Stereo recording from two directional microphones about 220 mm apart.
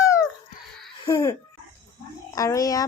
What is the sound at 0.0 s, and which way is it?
Dog, 15° left (ahead or behind).